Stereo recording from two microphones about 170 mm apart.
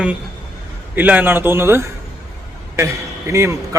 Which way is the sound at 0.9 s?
10° right (ahead or behind).